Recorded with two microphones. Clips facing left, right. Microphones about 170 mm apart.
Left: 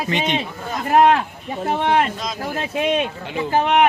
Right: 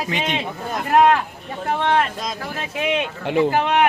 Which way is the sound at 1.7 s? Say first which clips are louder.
Left 1 dB; 20° left (ahead or behind).